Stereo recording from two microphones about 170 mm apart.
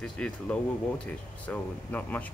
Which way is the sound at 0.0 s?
5° left (ahead or behind).